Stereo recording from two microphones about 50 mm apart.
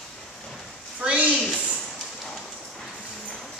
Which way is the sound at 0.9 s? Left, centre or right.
Right.